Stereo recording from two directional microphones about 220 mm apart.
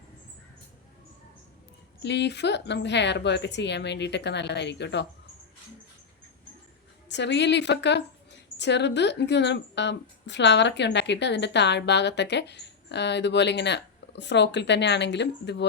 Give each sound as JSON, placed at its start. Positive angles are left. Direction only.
{"t": 2.0, "sound": "a woman's voice", "side_deg": 50}
{"t": 7.1, "sound": "a woman's voice", "side_deg": 50}